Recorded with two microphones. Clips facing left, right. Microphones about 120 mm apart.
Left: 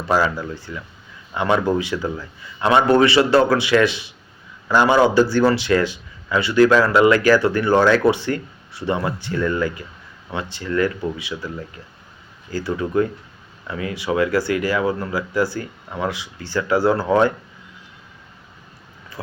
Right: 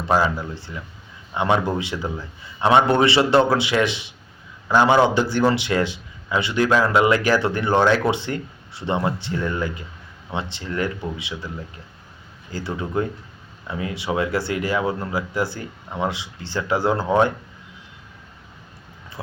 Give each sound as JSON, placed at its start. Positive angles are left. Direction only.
{"t": 0.1, "sound": "speech", "side_deg": -20}